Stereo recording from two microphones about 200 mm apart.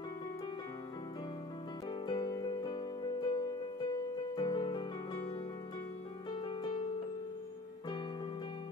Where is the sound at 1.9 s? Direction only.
20° left (ahead or behind).